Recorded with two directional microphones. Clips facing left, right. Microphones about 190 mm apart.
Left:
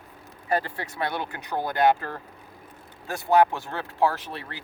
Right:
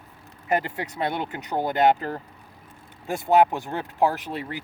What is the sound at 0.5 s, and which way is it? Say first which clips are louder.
Speech: right 2 dB; 20° right (ahead or behind).